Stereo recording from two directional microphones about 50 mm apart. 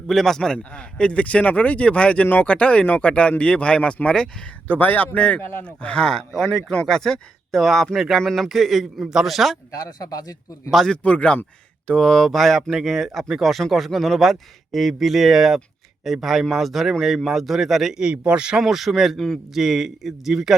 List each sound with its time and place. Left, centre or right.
0.1 s speech: centre
0.5 s speech: left
2.2 s speech: left
2.5 s speech: left
4.7 s speech: left
5.1 s speech: left
5.4 s speech: left
5.6 s speech: left
6.1 s a man's voice: centre
10.8 s speech: left
11.9 s a man's voice: centre
18.0 s a man's voice: right
18.6 s a man's voice: centre